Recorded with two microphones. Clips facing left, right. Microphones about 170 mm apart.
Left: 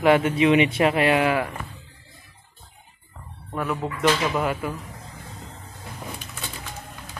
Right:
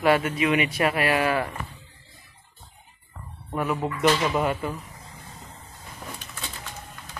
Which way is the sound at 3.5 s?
5° right (ahead or behind).